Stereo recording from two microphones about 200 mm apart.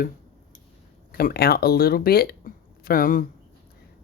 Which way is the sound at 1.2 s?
50° left (ahead or behind).